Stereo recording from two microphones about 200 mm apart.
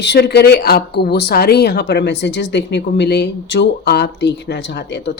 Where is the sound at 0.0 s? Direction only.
60° left (ahead or behind).